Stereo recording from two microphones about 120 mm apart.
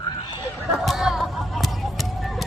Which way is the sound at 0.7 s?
Centre (ahead or behind).